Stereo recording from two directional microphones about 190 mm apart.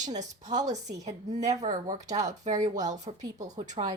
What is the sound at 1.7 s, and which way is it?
Speech, 40° right (ahead or behind).